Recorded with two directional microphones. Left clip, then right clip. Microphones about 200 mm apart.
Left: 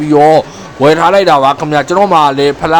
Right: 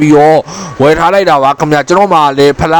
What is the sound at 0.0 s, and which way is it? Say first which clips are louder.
A man's voice: right 1 dB; 25° right (ahead or behind).